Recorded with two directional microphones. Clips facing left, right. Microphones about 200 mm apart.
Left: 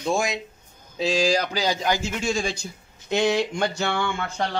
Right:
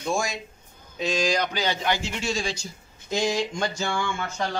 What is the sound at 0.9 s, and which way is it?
A man's voice, 30° left (ahead or behind).